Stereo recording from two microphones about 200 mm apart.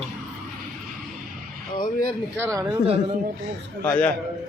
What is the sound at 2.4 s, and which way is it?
Speech, 15° right (ahead or behind).